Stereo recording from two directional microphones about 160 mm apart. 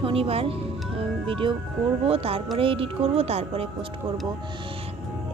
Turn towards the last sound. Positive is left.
turn(degrees=-40)  # may be behind; listen again after turning